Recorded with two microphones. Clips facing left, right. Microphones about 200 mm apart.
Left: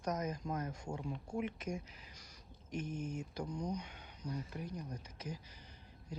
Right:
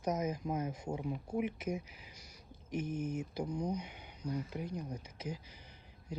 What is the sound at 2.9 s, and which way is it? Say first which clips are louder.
Speech: right 5 dB; 20° right (ahead or behind).